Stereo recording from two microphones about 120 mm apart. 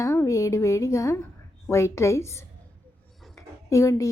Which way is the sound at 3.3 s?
25° left (ahead or behind).